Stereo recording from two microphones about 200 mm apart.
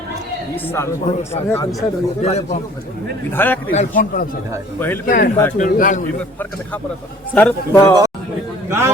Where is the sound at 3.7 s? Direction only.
40° left (ahead or behind).